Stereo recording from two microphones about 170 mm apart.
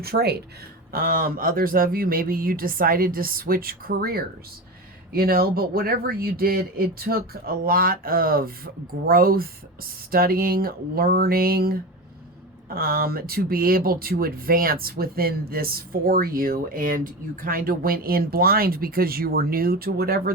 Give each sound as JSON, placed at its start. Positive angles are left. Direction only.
{"t": 0.0, "sound": "speech", "side_deg": -70}
{"t": 0.9, "sound": "speech", "side_deg": -60}